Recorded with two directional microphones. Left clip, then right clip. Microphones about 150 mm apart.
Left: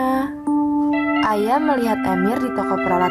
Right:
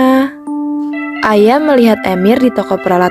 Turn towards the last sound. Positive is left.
turn(degrees=-50)  # may be behind; listen again after turning